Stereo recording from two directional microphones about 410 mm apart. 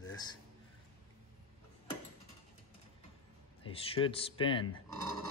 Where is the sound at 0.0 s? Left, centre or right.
Centre.